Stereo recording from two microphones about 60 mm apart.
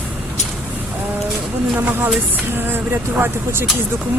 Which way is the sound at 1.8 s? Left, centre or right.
Right.